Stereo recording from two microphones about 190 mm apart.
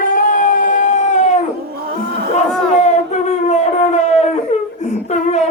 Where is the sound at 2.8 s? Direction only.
35° left (ahead or behind).